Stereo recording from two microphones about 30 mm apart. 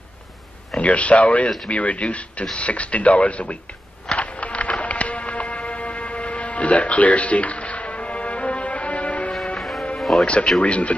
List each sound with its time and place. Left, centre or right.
0.8 s speech: left
4.2 s music: left
9.6 s music: centre
10.6 s speech: left